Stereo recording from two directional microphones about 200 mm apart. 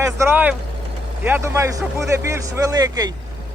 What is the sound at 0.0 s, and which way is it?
Speech, 10° right (ahead or behind).